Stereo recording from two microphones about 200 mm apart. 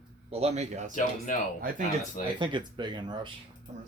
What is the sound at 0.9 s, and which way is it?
Speech, 40° left (ahead or behind).